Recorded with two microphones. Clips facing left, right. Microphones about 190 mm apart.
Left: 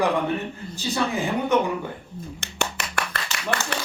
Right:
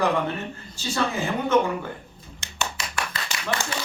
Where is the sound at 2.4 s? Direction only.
65° left (ahead or behind).